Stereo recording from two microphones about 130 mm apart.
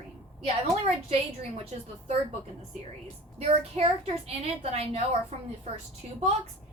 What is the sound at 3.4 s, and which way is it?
A woman's voice, 50° right (ahead or behind).